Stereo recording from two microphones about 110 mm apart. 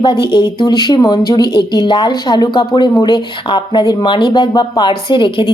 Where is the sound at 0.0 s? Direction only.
45° left (ahead or behind).